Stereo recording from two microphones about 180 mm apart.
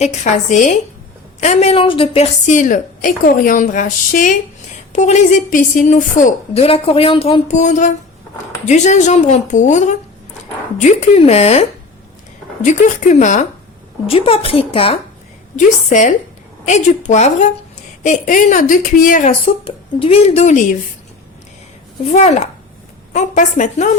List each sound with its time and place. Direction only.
0.0 s a woman's voice: 40° left (ahead or behind)
2.5 s a woman's voice: 45° left (ahead or behind)
12.6 s speech: 40° left (ahead or behind)
14.1 s a woman's voice: 30° left (ahead or behind)
15.5 s a woman's voice: 45° left (ahead or behind)
22.1 s a woman's voice: 40° left (ahead or behind)